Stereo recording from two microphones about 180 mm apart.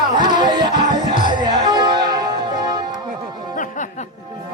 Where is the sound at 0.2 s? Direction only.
45° left (ahead or behind).